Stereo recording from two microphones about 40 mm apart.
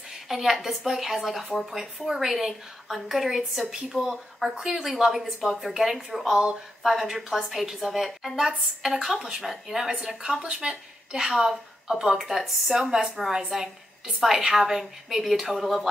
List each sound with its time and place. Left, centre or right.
0.1 s a woman's voice: centre
6.3 s speech: centre
6.8 s a woman's voice: centre
10.4 s a woman's voice: right; by 15.9 s centre